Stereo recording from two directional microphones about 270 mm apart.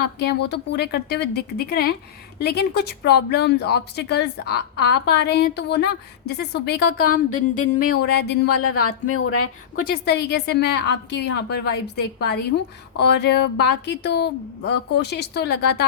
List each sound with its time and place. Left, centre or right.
0.0 s speech: left
8.6 s speech: left
9.9 s speech: left